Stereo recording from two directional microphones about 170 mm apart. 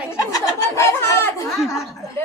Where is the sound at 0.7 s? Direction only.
15° left (ahead or behind).